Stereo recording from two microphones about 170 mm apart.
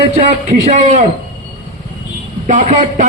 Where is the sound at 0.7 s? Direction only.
40° right (ahead or behind).